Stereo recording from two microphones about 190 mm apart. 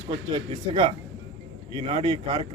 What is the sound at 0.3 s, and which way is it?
Speech, 30° right (ahead or behind).